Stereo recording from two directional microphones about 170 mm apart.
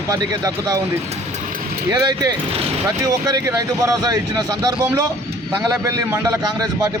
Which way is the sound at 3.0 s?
20° right (ahead or behind).